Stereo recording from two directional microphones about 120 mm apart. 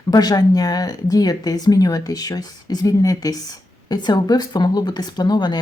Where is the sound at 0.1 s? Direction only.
35° left (ahead or behind).